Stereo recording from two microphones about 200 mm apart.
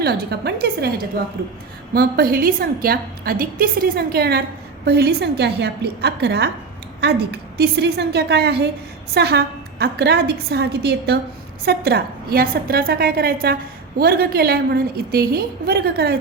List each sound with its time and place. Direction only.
0.0 s a woman's voice: 55° right (ahead or behind)
1.9 s a woman's voice: 50° right (ahead or behind)